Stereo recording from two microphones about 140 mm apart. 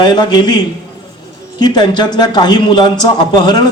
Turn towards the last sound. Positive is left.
turn(degrees=30)  # may be behind; listen again after turning